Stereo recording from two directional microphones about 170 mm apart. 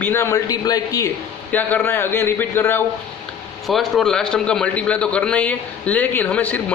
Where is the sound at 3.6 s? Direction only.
Centre (ahead or behind).